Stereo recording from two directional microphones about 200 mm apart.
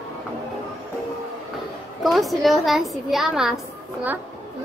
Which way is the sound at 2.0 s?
Centre (ahead or behind).